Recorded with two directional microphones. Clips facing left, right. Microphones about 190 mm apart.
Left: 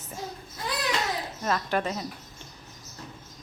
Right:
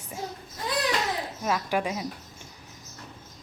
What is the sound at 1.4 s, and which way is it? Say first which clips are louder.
Speech: even; 10° right (ahead or behind).